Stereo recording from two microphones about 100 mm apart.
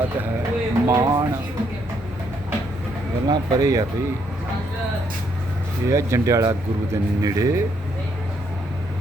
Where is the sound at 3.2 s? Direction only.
40° right (ahead or behind).